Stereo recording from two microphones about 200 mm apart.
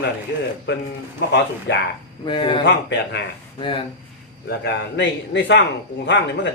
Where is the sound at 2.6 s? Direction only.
60° left (ahead or behind).